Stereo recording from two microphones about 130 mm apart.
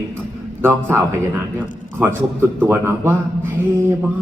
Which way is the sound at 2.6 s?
15° right (ahead or behind).